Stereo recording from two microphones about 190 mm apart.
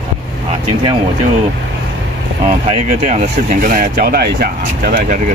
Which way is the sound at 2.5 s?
40° right (ahead or behind).